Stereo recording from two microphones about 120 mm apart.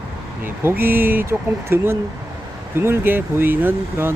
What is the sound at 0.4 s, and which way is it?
Speech, 15° right (ahead or behind).